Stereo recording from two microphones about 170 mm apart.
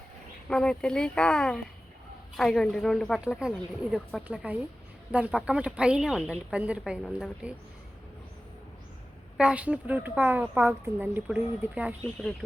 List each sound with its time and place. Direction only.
0.4 s a woman's voice: 5° left (ahead or behind)
9.4 s speech: 5° right (ahead or behind)